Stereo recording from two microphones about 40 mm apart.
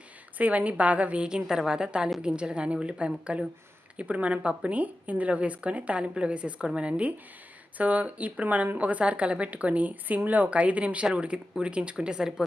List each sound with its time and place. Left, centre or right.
0.3 s a woman's voice: right
7.8 s a woman's voice: right